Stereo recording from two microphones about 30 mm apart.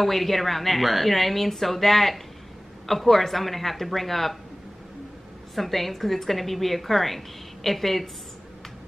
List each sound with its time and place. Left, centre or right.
0.0 s a woman's voice: centre
5.5 s a woman's voice: centre